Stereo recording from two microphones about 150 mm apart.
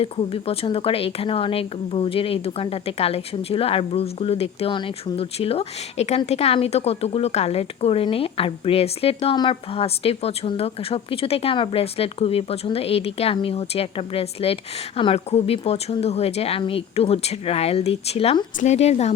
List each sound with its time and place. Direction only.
0.0 s a woman's voice: 40° left (ahead or behind)